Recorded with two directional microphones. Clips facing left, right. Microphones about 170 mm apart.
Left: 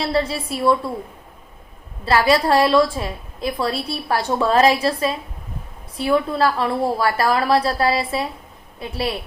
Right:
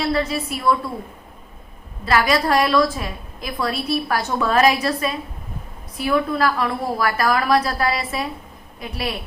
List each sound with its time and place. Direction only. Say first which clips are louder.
0.0 s a woman's voice: even; 30° left (ahead or behind)
2.0 s a woman's voice: left 2 dB; 30° left (ahead or behind)